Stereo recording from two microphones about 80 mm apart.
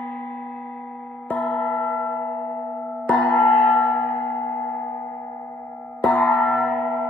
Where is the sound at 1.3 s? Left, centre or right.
Centre.